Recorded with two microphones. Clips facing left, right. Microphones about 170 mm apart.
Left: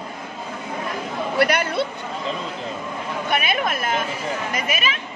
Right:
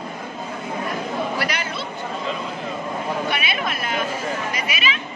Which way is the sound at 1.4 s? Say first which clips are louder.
Left 7 dB; 55° left (ahead or behind).